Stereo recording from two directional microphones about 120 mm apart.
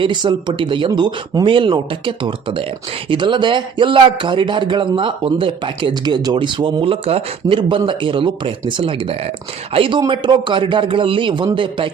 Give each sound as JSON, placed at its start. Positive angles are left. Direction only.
{"t": 0.0, "sound": "speech", "side_deg": -40}